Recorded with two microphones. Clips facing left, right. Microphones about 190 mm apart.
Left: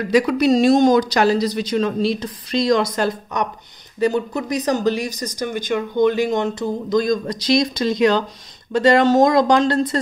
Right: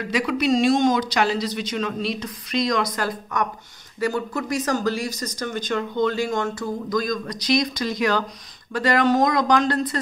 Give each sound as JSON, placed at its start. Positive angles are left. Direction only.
{"t": 0.1, "sound": "speech", "side_deg": 40}